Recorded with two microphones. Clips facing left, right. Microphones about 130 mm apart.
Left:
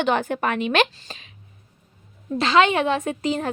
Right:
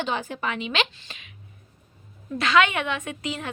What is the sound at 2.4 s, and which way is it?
A woman's voice, 30° left (ahead or behind).